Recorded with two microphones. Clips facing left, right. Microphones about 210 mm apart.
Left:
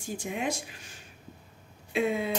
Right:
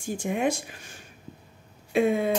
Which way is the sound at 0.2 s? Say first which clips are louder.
Right 8 dB; 55° right (ahead or behind).